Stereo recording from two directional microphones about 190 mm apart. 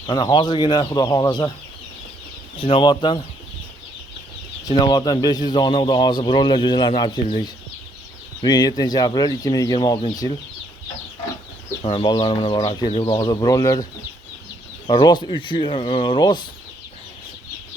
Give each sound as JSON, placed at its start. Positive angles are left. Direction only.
{"t": 0.1, "sound": "speech", "side_deg": 25}
{"t": 2.6, "sound": "speech", "side_deg": 30}
{"t": 4.6, "sound": "speech", "side_deg": 20}
{"t": 8.4, "sound": "speech", "side_deg": 20}
{"t": 11.8, "sound": "speech", "side_deg": 25}
{"t": 14.8, "sound": "speech", "side_deg": 25}